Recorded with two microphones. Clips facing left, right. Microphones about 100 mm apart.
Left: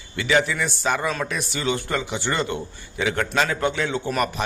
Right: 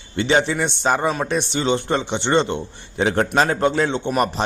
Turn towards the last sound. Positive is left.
turn(degrees=-30)  # may be behind; listen again after turning